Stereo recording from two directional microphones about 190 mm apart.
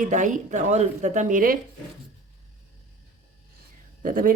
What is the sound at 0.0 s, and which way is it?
Speech, 40° right (ahead or behind).